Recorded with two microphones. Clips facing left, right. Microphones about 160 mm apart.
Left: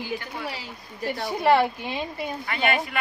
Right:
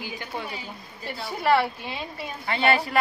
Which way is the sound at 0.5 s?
80° left.